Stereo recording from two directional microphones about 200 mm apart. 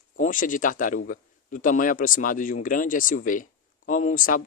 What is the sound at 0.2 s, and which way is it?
A man's voice, 40° left (ahead or behind).